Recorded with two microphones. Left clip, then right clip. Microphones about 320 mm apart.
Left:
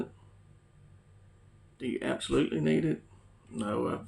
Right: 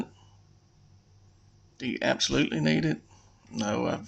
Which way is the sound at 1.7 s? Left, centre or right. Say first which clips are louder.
Right 6 dB; right.